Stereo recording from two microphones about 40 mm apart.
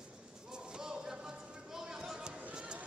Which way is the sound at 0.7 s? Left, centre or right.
Centre.